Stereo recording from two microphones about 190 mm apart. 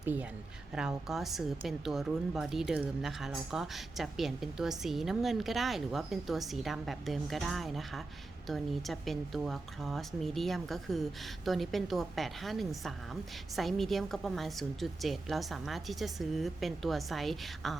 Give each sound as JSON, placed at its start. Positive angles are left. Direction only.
{"t": 0.0, "sound": "a woman's voice", "side_deg": -10}